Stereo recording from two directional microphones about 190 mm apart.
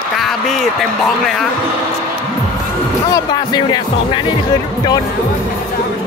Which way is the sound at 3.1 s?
20° left (ahead or behind).